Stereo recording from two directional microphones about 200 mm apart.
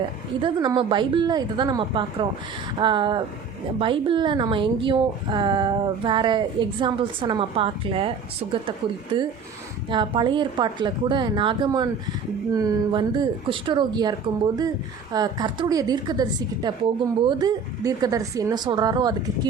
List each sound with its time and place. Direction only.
0.4 s a woman's voice: 20° right (ahead or behind)
9.1 s a woman's voice: 25° right (ahead or behind)